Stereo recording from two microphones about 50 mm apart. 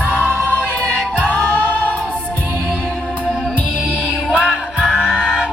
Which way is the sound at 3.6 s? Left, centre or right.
Right.